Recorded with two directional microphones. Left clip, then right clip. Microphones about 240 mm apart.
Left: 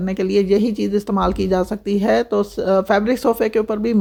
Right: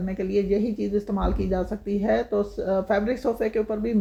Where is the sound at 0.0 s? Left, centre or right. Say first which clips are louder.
Left 7 dB; left.